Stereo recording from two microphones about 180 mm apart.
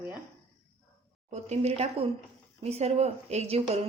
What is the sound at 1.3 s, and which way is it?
A woman's voice, 35° right (ahead or behind).